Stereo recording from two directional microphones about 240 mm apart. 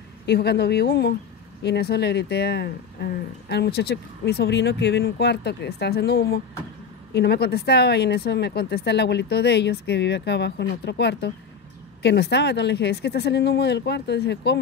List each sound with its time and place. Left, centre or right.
0.3 s speech: left